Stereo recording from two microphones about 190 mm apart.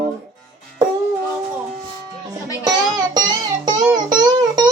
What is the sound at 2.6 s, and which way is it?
Music, 20° right (ahead or behind).